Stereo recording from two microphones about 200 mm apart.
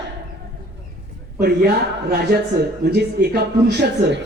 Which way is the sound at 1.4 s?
50° right (ahead or behind).